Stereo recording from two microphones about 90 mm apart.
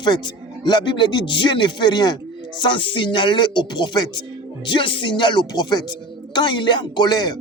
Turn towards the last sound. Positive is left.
turn(degrees=50)  # may be behind; listen again after turning